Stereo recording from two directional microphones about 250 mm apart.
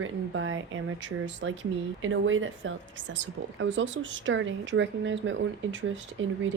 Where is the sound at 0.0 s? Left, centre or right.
Right.